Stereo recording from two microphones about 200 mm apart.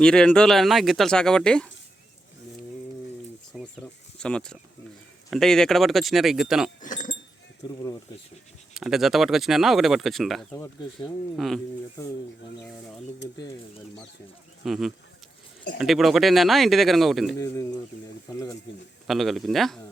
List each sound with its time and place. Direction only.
0.0 s speech: 5° left (ahead or behind)
3.5 s a sound: centre (ahead or behind)
4.2 s speech: 5° left (ahead or behind)
6.8 s sheep: 40° left (ahead or behind)
8.7 s speech: centre (ahead or behind)
10.5 s speech: 15° left (ahead or behind)
11.3 s speech: centre (ahead or behind)
14.6 s speech: centre (ahead or behind)
17.3 s speech: 15° left (ahead or behind)
19.0 s speech: centre (ahead or behind)